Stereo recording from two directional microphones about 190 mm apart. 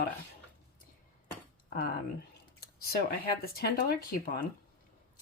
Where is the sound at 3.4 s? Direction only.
50° left (ahead or behind).